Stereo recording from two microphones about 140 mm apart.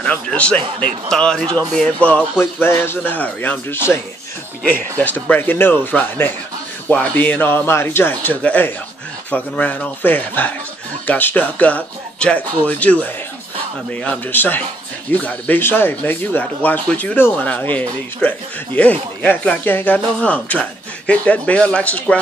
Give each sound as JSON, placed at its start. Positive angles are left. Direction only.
{"t": 0.0, "sound": "speech", "side_deg": 10}
{"t": 5.0, "sound": "speech", "side_deg": 10}